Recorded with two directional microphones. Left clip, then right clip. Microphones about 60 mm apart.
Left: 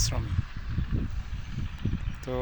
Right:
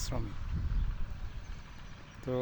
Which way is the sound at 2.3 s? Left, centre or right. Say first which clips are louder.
Left 2 dB; right.